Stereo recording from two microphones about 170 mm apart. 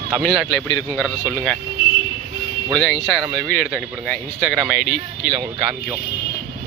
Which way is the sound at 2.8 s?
5° left (ahead or behind).